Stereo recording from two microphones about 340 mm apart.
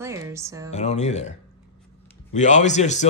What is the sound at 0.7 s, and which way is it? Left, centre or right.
Speech, centre.